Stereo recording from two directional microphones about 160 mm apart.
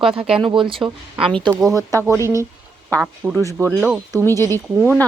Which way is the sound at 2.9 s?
10° left (ahead or behind).